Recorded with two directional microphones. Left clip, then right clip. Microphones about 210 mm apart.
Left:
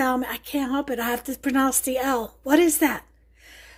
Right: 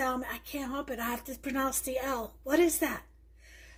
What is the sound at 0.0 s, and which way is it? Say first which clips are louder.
A woman's voice: left 8 dB; 45° left (ahead or behind).